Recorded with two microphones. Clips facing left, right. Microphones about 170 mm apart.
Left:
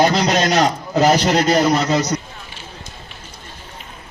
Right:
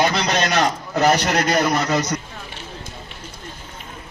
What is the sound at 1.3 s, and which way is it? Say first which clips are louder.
Speech: left 4 dB; 25° left (ahead or behind).